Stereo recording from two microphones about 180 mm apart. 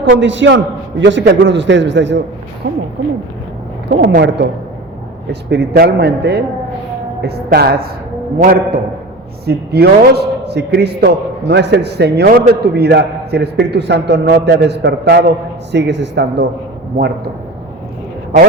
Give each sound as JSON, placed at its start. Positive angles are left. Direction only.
{"t": 0.1, "sound": "a man's voice", "side_deg": -90}
{"t": 4.1, "sound": "a man's voice", "side_deg": -75}